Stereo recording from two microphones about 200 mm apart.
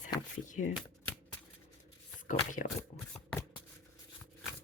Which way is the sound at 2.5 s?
40° left (ahead or behind).